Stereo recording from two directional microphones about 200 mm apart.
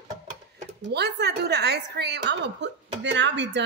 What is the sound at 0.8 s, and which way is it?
A woman's voice, 60° right (ahead or behind).